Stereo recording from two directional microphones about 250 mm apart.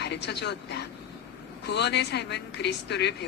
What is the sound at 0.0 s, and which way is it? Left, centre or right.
A woman's voice, left.